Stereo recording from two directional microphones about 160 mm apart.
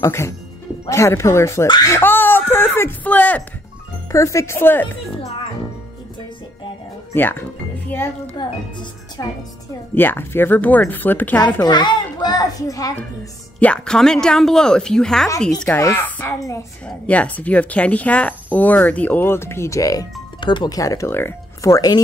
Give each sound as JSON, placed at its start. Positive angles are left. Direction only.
{"t": 0.0, "sound": "a woman's voice", "side_deg": 15}
{"t": 7.2, "sound": "a woman's voice", "side_deg": 15}
{"t": 8.4, "sound": "speech", "side_deg": 25}
{"t": 9.9, "sound": "a woman's voice", "side_deg": 15}
{"t": 11.6, "sound": "a child's voice", "side_deg": 25}
{"t": 13.6, "sound": "speech", "side_deg": 5}
{"t": 15.8, "sound": "a woman's voice", "side_deg": 15}